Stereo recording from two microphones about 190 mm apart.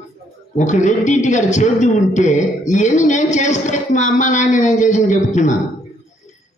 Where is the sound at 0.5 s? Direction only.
40° left (ahead or behind).